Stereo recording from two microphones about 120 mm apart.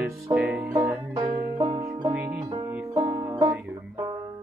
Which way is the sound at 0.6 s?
20° right (ahead or behind).